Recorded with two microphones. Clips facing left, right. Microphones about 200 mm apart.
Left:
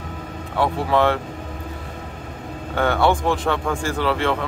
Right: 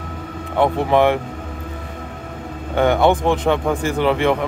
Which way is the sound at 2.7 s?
20° right (ahead or behind).